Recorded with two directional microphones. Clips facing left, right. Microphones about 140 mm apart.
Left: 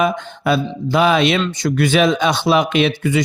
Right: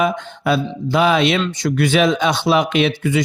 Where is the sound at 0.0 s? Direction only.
50° left (ahead or behind).